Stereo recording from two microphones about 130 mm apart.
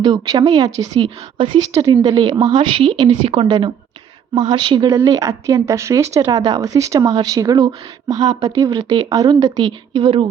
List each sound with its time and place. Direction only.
0.0 s a woman's voice: 35° right (ahead or behind)